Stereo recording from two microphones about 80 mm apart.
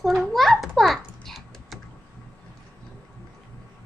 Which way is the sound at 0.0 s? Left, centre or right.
Centre.